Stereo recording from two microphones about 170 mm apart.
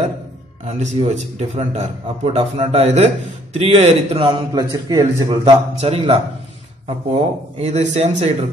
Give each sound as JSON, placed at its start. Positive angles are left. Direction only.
{"t": 0.7, "sound": "a man's voice", "side_deg": -40}
{"t": 5.4, "sound": "a man's voice", "side_deg": -35}
{"t": 7.5, "sound": "a man's voice", "side_deg": -40}